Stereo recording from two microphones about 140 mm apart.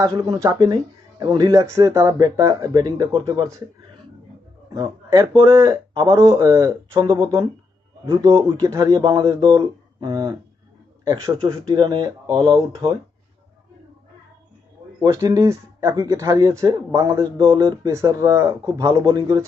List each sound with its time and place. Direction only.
0.0 s speech: 25° right (ahead or behind)
4.7 s speech: 30° right (ahead or behind)
5.5 s speech: 20° right (ahead or behind)
8.0 s speech: 35° right (ahead or behind)
8.5 s a man's voice: 25° right (ahead or behind)
15.2 s speech: 25° right (ahead or behind)
17.3 s speech: 30° right (ahead or behind)